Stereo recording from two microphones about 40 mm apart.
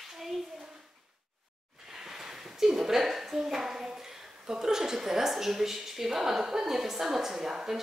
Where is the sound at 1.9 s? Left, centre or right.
Centre.